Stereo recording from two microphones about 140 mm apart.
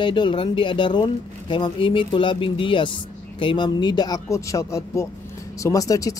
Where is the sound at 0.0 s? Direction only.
35° left (ahead or behind).